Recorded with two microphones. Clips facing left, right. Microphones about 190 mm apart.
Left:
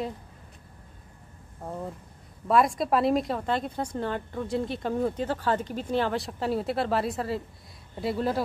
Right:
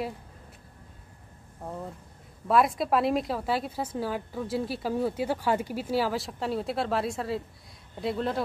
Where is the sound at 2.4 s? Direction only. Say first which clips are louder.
Left 1 dB; centre (ahead or behind).